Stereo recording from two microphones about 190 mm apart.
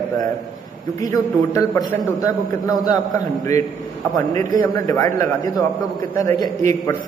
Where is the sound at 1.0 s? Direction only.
20° left (ahead or behind).